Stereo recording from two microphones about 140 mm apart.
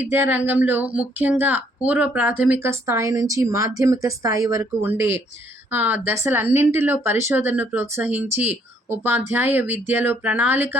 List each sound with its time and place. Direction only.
0.0 s speech: 15° right (ahead or behind)